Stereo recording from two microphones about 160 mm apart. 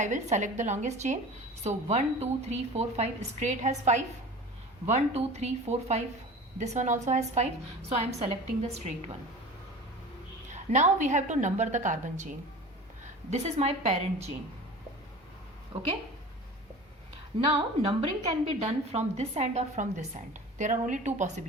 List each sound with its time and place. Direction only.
0.0 s a woman's voice: 50° right (ahead or behind)
10.5 s a woman's voice: 45° right (ahead or behind)
13.3 s a woman's voice: 45° right (ahead or behind)
15.7 s speech: 30° right (ahead or behind)
17.4 s a woman's voice: 35° right (ahead or behind)